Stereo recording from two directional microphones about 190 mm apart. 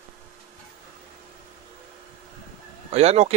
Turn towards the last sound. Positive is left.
turn(degrees=-35)  # may be behind; listen again after turning